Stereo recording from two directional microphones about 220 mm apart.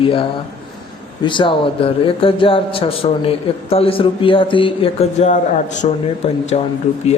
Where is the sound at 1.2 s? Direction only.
20° left (ahead or behind).